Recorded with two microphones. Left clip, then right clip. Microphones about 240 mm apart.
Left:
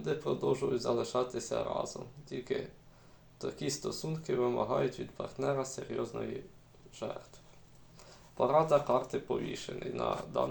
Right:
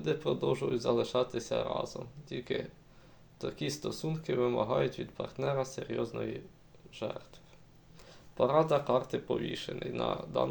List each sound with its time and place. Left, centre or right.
0.0 s speech: right
8.4 s speech: right